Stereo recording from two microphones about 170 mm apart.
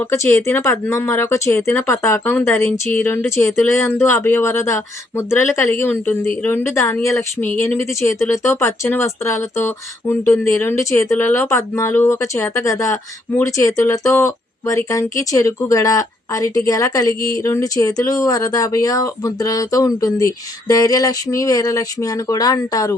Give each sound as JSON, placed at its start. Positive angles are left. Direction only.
{"t": 0.0, "sound": "speech", "side_deg": 10}